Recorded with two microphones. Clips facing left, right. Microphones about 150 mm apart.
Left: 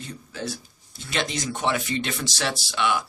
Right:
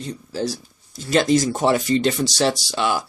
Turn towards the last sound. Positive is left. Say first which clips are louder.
# right 3 dB
turn(degrees=-35)  # may be behind; listen again after turning